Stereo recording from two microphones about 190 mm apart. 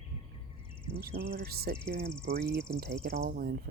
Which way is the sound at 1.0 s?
55° right (ahead or behind).